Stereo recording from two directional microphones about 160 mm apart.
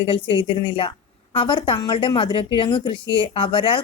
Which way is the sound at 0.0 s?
35° left (ahead or behind).